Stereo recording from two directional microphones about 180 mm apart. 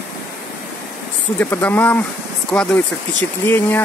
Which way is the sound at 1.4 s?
10° left (ahead or behind).